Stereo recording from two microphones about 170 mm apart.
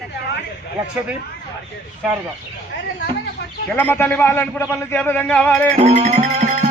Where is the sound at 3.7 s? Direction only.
10° left (ahead or behind).